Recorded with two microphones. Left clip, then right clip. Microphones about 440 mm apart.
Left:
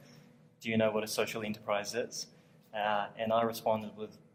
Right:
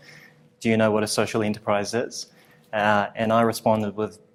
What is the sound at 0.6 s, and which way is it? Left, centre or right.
Speech, right.